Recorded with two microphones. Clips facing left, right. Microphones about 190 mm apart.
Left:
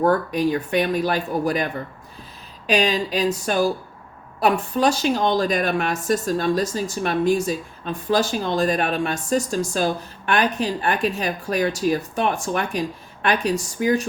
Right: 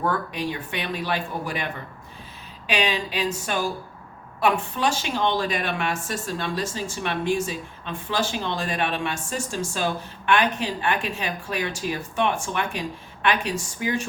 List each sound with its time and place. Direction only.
0.0 s speech: 40° left (ahead or behind)
2.6 s speech: 40° left (ahead or behind)